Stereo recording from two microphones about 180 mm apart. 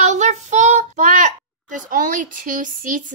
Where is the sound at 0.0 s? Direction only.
40° right (ahead or behind).